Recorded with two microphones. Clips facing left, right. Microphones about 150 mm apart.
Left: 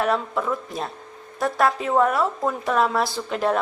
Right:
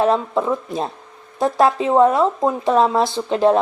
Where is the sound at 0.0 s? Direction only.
25° right (ahead or behind).